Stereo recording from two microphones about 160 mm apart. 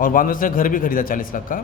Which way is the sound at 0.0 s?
60° left (ahead or behind).